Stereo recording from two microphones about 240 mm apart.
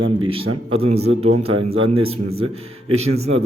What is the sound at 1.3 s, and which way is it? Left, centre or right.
Speech, right.